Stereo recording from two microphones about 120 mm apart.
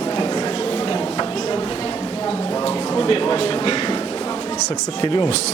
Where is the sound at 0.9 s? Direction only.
40° left (ahead or behind).